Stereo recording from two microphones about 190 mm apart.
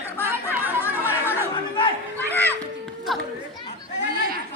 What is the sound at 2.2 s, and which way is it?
Children playing, 10° left (ahead or behind).